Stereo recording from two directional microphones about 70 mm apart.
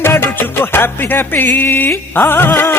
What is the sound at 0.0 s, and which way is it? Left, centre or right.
Music, left.